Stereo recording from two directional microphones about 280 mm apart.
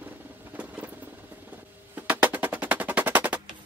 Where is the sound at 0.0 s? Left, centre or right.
Centre.